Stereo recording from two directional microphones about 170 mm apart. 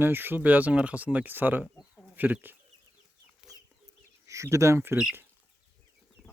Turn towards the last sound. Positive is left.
turn(degrees=-5)  # may be behind; listen again after turning